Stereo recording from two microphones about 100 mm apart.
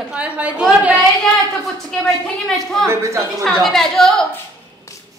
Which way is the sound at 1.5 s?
5° left (ahead or behind).